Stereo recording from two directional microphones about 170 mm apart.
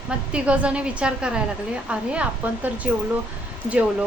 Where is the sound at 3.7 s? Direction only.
5° right (ahead or behind).